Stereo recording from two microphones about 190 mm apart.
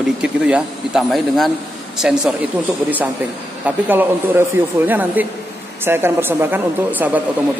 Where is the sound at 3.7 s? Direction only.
10° right (ahead or behind).